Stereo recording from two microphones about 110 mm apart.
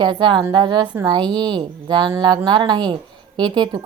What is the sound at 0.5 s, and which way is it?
Speech, 40° right (ahead or behind).